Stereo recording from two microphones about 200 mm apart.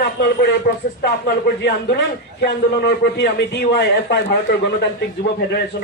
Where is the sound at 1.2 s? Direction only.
50° left (ahead or behind).